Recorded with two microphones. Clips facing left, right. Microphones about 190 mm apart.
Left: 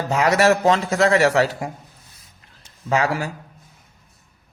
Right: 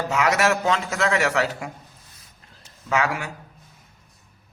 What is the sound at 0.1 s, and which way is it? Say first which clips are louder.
A man's voice: left 5 dB; 35° left (ahead or behind).